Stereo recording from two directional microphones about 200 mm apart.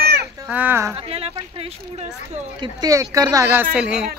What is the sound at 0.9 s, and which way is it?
Speech, 30° right (ahead or behind).